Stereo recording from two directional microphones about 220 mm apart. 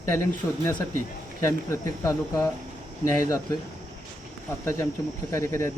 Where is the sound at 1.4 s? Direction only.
15° left (ahead or behind).